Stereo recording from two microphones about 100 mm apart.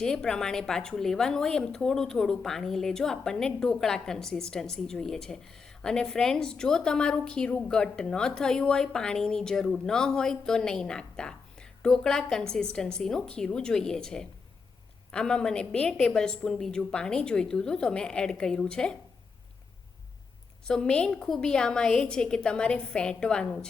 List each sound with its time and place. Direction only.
0.0 s speech: 5° left (ahead or behind)
20.7 s speech: 10° left (ahead or behind)